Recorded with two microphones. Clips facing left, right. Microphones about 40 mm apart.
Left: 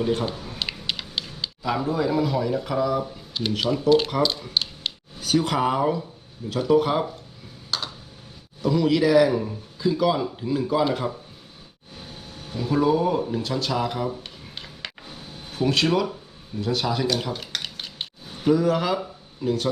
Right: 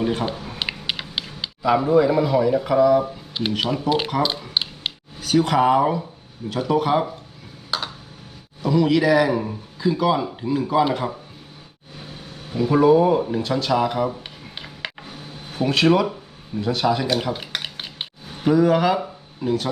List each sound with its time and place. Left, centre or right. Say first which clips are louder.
0.0 s speech: right 1 dB; centre
0.3 s a sound: right 3 dB; right; by 3.0 s centre
3.0 s speech: right 3 dB; right
5.2 s speech: right 4 dB; centre
7.7 s computer keyboard: right 3 dB; centre
8.6 s a man's voice: right 2 dB; centre
9.3 s speech: right 2 dB; right
9.8 s speech: right 2 dB; centre
12.5 s speech: right 6 dB; right
14.3 s a sound: right 3 dB; centre
15.5 s speech: right 4 dB; centre
17.1 s stir: right 3 dB; centre
18.5 s speech: right 5 dB; centre